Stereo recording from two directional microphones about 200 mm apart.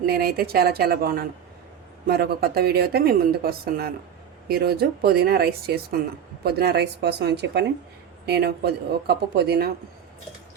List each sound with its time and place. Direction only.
0.0 s speech: 50° right (ahead or behind)